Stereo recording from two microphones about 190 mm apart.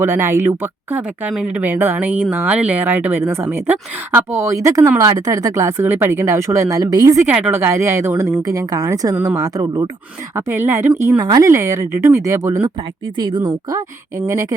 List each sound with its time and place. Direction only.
0.0 s speech: 10° right (ahead or behind)